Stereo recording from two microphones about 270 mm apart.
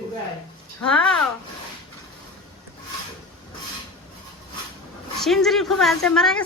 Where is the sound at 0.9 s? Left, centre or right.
Centre.